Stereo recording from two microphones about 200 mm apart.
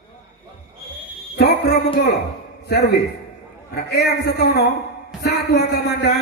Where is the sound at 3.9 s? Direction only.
55° left (ahead or behind).